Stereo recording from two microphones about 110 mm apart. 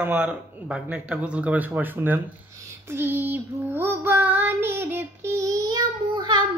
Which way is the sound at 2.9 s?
20° right (ahead or behind).